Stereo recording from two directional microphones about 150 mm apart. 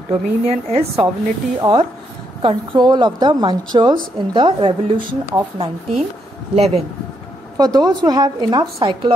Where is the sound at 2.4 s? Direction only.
35° right (ahead or behind).